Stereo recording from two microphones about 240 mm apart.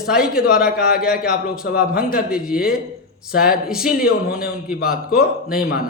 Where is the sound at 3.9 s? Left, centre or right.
Left.